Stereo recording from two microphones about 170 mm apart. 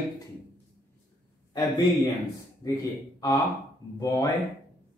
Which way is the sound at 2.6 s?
20° left (ahead or behind).